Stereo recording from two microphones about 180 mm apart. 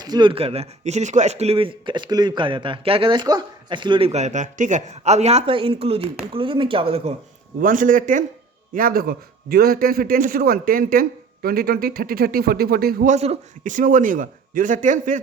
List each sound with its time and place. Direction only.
0.0 s speech: 25° right (ahead or behind)
7.6 s a man's voice: 50° right (ahead or behind)
13.1 s a man's voice: 35° right (ahead or behind)